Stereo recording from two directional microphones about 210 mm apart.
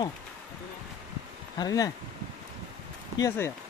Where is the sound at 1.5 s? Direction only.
20° left (ahead or behind).